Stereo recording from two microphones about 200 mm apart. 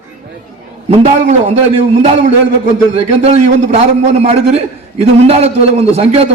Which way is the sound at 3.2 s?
30° right (ahead or behind).